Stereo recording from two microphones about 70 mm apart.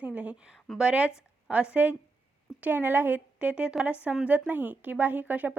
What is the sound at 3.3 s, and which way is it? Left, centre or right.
Speech, centre.